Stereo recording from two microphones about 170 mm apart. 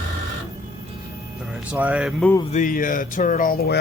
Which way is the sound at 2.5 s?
50° left (ahead or behind).